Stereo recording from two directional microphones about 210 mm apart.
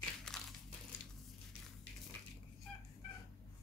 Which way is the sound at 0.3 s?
Centre (ahead or behind).